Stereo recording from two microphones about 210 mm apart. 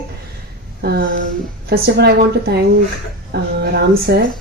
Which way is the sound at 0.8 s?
45° right (ahead or behind).